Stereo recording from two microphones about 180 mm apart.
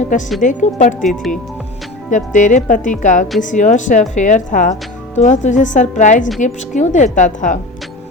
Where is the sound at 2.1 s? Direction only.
45° left (ahead or behind).